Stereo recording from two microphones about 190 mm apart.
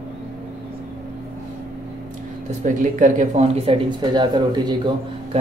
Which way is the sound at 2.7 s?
45° right (ahead or behind).